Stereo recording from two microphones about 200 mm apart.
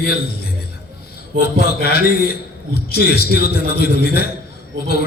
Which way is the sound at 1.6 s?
50° left (ahead or behind).